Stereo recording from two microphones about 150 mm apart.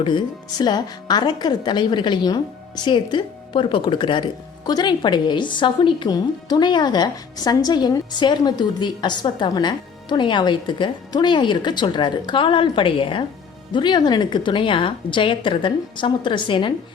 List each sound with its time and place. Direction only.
0.6 s a woman's voice: 30° left (ahead or behind)